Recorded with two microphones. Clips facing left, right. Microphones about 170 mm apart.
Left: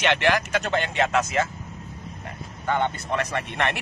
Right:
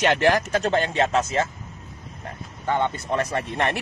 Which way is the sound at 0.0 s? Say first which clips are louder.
Right 3 dB; 35° right (ahead or behind).